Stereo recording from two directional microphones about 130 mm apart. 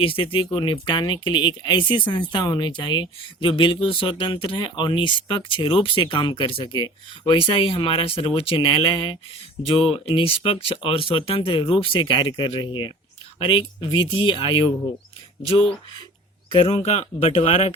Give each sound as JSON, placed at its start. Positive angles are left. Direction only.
{"t": 0.0, "sound": "speech", "side_deg": 45}